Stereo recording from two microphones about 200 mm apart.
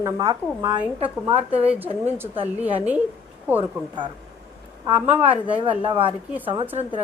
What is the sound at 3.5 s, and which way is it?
Speech, 10° right (ahead or behind).